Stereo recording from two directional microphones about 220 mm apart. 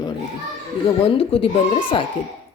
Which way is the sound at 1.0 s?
25° left (ahead or behind).